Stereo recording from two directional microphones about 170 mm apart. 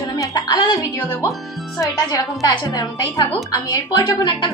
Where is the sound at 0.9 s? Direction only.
15° left (ahead or behind).